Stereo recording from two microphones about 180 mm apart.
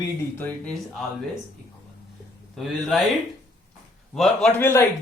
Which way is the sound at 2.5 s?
Centre (ahead or behind).